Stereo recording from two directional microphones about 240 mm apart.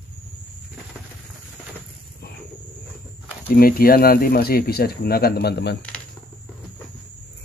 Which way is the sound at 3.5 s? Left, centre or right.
Left.